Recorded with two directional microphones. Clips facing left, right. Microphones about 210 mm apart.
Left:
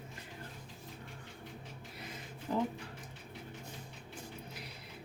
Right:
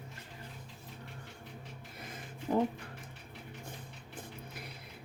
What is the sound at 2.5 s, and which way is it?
Speech, 30° right (ahead or behind).